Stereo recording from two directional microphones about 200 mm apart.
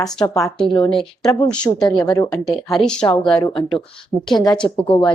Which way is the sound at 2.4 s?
Centre (ahead or behind).